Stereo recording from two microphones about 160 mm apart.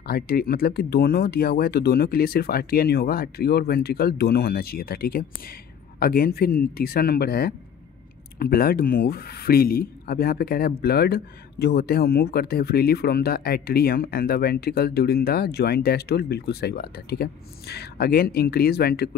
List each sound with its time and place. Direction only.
0.0 s speech: 70° left (ahead or behind)